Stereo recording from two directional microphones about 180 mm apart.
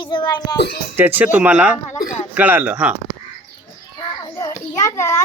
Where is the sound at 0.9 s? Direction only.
10° right (ahead or behind).